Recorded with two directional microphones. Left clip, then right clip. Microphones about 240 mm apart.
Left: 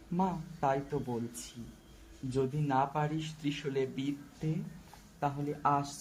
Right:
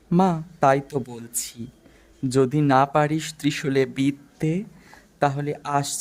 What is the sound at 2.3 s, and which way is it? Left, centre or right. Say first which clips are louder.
Speech: right 13 dB; right.